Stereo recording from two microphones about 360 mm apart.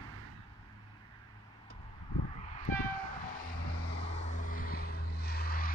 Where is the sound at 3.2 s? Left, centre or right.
Left.